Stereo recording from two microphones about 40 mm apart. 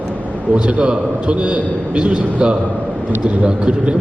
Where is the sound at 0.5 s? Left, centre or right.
Right.